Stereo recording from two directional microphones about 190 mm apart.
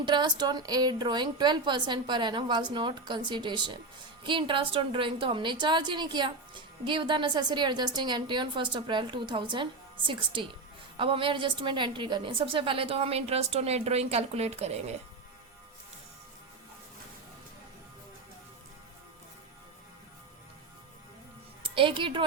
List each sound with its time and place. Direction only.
0.0 s a woman's voice: 25° right (ahead or behind)
21.6 s speech: 25° right (ahead or behind)